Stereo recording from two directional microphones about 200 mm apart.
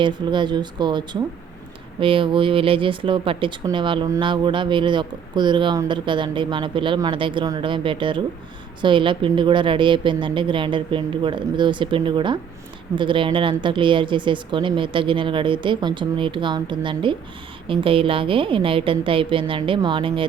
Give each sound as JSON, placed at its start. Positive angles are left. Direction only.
{"t": 0.0, "sound": "speech", "side_deg": -25}